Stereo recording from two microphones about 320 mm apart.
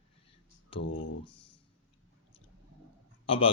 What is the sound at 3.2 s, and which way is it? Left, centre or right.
Speech, centre.